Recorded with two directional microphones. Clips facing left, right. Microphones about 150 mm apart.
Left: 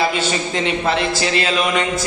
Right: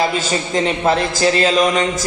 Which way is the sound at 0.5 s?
40° right (ahead or behind).